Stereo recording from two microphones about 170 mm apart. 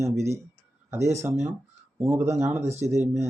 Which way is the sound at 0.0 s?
15° right (ahead or behind).